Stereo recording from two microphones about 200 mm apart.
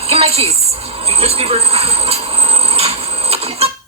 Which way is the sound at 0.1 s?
30° right (ahead or behind).